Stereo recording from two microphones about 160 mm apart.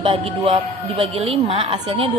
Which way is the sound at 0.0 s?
35° right (ahead or behind).